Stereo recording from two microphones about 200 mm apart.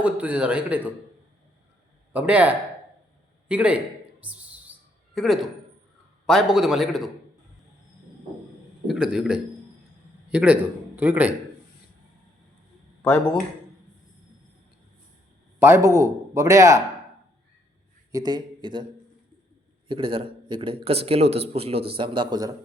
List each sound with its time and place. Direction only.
0.0 s speech: 5° right (ahead or behind)
2.1 s speech: 5° right (ahead or behind)
4.2 s a sound: 5° right (ahead or behind)
6.2 s a man's voice: centre (ahead or behind)
8.9 s a man's voice: 5° right (ahead or behind)
13.0 s speech: 5° left (ahead or behind)
15.5 s speech: 10° right (ahead or behind)
18.1 s a man's voice: 20° right (ahead or behind)
19.9 s speech: 25° right (ahead or behind)